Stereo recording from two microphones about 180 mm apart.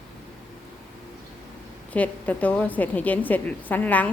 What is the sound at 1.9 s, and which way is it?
A woman's voice, 10° left (ahead or behind).